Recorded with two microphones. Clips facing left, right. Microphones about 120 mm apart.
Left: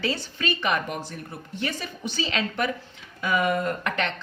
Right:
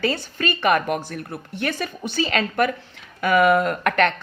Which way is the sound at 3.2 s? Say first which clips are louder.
Right 7 dB; 75° right (ahead or behind).